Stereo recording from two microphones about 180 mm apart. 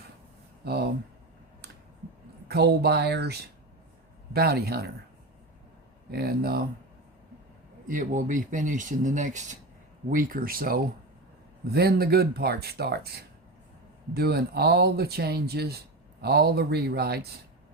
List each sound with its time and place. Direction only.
0.6 s speech: 60° right (ahead or behind)
2.5 s speech: 65° right (ahead or behind)
6.1 s speech: 60° right (ahead or behind)
7.9 s speech: 45° right (ahead or behind)
14.1 s speech: 60° right (ahead or behind)